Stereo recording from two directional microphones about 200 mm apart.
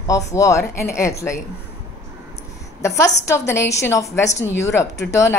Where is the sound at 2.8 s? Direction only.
15° left (ahead or behind).